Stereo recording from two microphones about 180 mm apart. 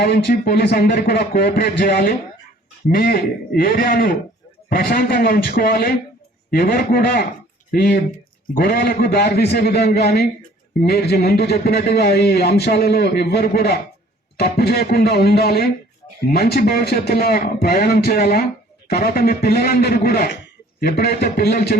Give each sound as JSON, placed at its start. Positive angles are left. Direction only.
{"t": 0.0, "sound": "speech", "side_deg": 60}